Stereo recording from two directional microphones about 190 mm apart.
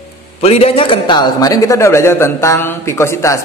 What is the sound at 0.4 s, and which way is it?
A man's voice, 30° left (ahead or behind).